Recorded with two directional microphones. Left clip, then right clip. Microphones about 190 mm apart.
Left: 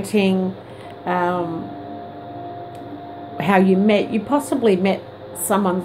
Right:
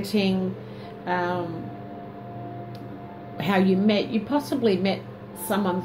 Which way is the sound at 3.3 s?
20° left (ahead or behind).